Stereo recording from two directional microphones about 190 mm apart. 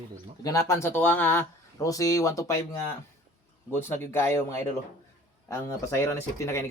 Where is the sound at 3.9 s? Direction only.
10° left (ahead or behind).